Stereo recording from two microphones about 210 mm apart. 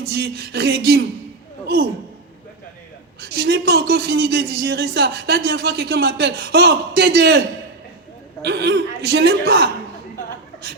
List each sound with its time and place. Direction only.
0.0 s a man's voice: 50° right (ahead or behind)
3.2 s a man's voice: 50° right (ahead or behind)